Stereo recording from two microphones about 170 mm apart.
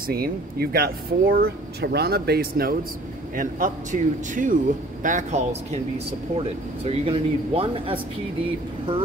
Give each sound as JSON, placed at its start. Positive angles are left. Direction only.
{"t": 0.0, "sound": "a man's voice", "side_deg": -65}